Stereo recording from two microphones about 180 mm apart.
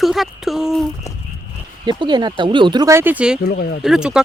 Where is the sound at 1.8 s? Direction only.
25° right (ahead or behind); by 3.4 s 5° right (ahead or behind).